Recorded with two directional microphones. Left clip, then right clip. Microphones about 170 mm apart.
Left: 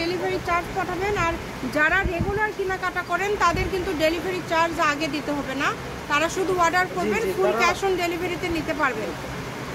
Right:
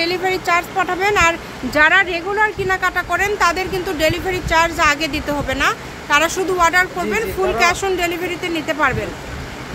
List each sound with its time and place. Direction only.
0.0 s speech: 35° right (ahead or behind)
1.8 s speech: 40° right (ahead or behind)